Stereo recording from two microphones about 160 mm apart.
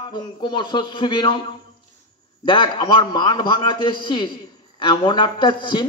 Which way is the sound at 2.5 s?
30° left (ahead or behind).